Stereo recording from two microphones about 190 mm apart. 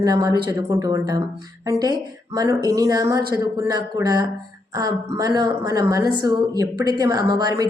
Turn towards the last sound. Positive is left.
turn(degrees=-20)  # may be behind; listen again after turning